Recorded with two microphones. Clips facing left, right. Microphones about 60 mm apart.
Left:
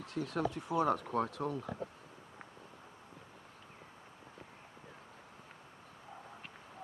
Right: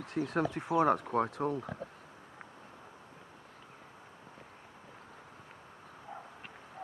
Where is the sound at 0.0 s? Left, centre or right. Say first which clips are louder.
Right 4 dB; right.